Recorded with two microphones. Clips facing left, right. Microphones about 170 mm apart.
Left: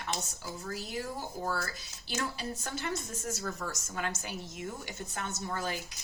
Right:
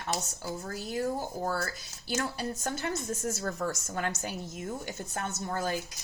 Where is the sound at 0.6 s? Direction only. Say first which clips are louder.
Right 5 dB; 45° right (ahead or behind).